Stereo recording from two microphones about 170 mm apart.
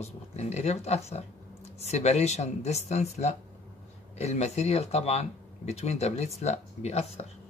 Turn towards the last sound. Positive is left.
turn(degrees=40)  # may be behind; listen again after turning